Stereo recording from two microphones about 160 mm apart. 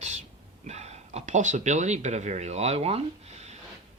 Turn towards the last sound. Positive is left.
turn(degrees=-45)  # may be behind; listen again after turning